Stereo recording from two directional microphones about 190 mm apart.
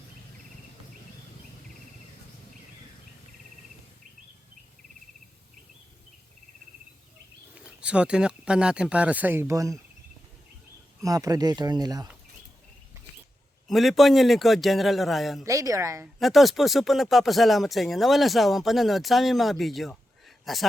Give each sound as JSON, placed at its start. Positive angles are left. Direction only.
{"t": 7.5, "sound": "speech", "side_deg": -5}
{"t": 11.0, "sound": "speech", "side_deg": -20}
{"t": 13.7, "sound": "speech", "side_deg": 0}
{"t": 15.4, "sound": "speech", "side_deg": -15}
{"t": 16.2, "sound": "speech", "side_deg": 0}